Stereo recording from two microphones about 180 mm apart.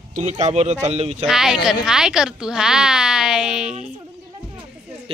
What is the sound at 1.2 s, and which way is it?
Speech, centre (ahead or behind).